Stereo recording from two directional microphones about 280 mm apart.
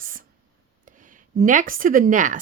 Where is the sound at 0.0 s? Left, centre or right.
Right.